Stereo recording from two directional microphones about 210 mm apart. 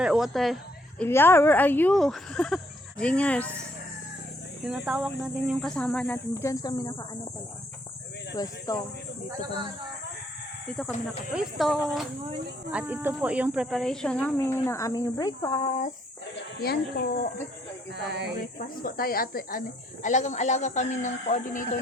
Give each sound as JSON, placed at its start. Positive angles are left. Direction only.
{"t": 0.0, "sound": "a sound", "side_deg": 0}
{"t": 1.0, "sound": "speech", "side_deg": 10}
{"t": 4.6, "sound": "speech", "side_deg": -5}
{"t": 8.4, "sound": "speech", "side_deg": 15}
{"t": 11.3, "sound": "speech", "side_deg": 0}
{"t": 16.3, "sound": "speech", "side_deg": 45}
{"t": 17.9, "sound": "speech", "side_deg": -55}
{"t": 18.6, "sound": "speech", "side_deg": 45}